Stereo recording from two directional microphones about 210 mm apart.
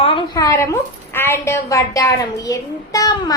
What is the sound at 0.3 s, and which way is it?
A woman's voice, 15° left (ahead or behind).